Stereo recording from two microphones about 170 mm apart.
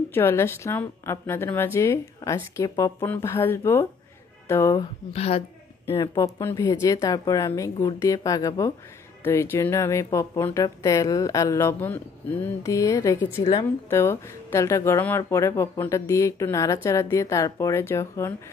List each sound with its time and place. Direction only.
0.1 s speech: 15° left (ahead or behind)
5.1 s a woman's voice: 35° left (ahead or behind)
5.9 s speech: 25° left (ahead or behind)
13.4 s a woman's voice: 30° left (ahead or behind)
13.8 s speech: 15° left (ahead or behind)